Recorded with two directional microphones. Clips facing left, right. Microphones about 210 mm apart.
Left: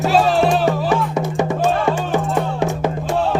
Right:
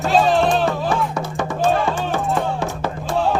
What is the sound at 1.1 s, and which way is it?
Music, 20° left (ahead or behind).